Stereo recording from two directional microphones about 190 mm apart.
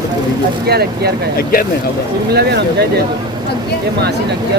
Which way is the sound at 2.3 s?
60° right (ahead or behind).